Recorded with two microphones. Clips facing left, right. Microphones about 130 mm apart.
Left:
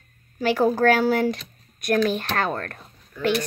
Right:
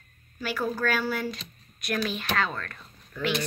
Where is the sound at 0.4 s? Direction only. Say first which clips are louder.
Left 9 dB; 65° left (ahead or behind).